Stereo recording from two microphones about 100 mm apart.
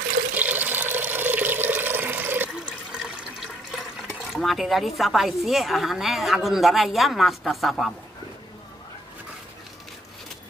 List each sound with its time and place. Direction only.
0.3 s water: 15° right (ahead or behind)
3.7 s speech: centre (ahead or behind)